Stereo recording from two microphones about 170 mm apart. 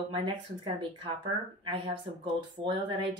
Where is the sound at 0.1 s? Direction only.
30° right (ahead or behind).